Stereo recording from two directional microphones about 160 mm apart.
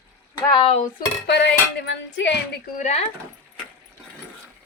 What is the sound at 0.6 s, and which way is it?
Speech, 40° left (ahead or behind).